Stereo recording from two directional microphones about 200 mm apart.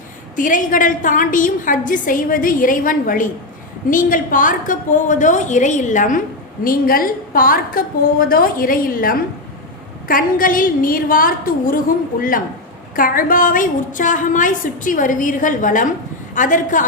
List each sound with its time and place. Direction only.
0.3 s a woman's voice: 40° left (ahead or behind)
13.0 s a woman's voice: 45° left (ahead or behind)